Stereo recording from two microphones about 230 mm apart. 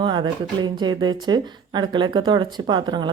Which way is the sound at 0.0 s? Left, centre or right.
Centre.